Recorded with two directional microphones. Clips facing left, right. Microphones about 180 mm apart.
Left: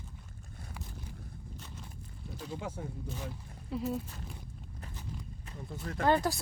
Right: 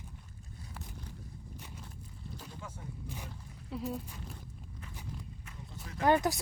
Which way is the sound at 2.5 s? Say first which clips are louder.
Left 8 dB; 70° left (ahead or behind).